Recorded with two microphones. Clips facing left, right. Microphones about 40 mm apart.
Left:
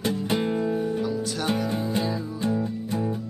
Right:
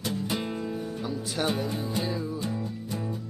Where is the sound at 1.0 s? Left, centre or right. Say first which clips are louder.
Left 6 dB; centre.